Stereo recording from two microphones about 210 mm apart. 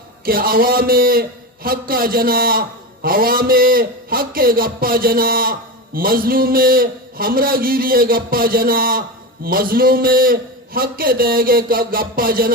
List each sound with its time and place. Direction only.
0.3 s a man's voice: 45° right (ahead or behind)